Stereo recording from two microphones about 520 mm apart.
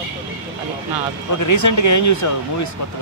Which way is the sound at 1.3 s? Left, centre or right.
Left.